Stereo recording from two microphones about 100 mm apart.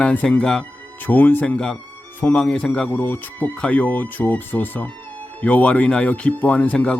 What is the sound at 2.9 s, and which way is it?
Speech, 20° left (ahead or behind).